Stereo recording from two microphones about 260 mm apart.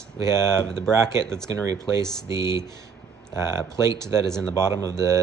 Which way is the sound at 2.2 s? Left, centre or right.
Centre.